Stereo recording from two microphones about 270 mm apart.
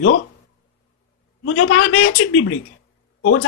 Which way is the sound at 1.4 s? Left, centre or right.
Left.